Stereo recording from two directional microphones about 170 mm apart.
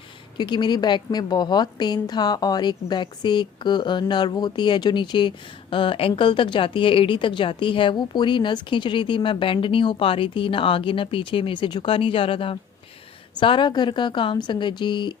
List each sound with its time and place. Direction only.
0.3 s a woman's voice: 25° left (ahead or behind)